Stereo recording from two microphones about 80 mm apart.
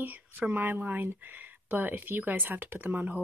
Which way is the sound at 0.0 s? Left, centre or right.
Right.